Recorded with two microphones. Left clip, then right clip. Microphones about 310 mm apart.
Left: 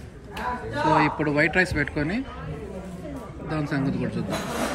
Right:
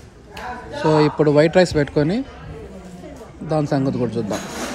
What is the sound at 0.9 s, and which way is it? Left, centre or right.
Speech, centre.